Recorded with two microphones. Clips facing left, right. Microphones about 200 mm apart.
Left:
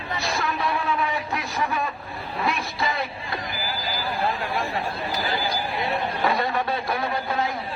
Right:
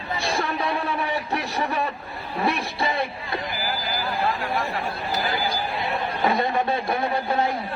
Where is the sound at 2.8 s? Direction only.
30° right (ahead or behind).